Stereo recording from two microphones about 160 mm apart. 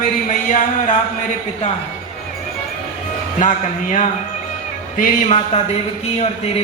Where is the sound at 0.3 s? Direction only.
55° left (ahead or behind).